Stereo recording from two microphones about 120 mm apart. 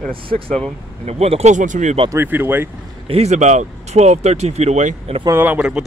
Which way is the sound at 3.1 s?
65° right (ahead or behind).